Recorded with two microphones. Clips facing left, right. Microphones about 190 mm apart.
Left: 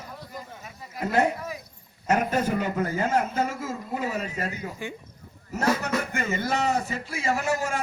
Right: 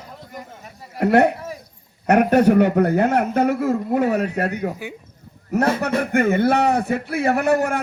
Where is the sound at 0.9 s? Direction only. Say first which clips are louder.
Right 8 dB; 65° right (ahead or behind).